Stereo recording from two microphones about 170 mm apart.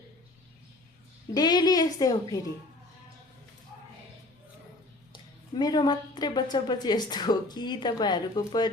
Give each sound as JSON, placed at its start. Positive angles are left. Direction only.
{"t": 1.3, "sound": "a woman's voice", "side_deg": 25}
{"t": 5.1, "sound": "a woman's voice", "side_deg": 25}